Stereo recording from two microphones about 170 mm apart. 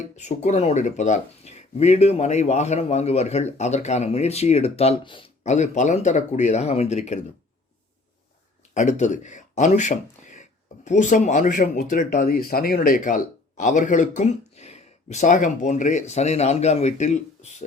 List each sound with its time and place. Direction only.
0.2 s speech: 40° left (ahead or behind)
5.4 s speech: 45° left (ahead or behind)
8.7 s speech: 45° left (ahead or behind)